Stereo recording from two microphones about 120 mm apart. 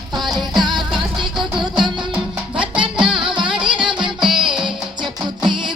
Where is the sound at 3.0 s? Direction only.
45° right (ahead or behind).